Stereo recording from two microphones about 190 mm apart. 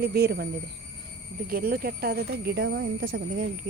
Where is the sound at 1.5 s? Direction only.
50° right (ahead or behind).